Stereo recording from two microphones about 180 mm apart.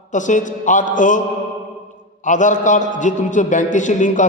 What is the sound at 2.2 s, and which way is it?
A man's voice, 45° left (ahead or behind).